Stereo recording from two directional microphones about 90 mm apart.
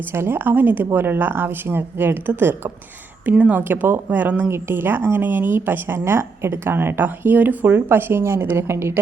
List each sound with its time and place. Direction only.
0.1 s speech: 25° right (ahead or behind)